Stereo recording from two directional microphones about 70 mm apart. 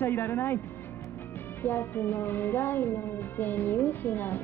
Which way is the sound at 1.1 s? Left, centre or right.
Left.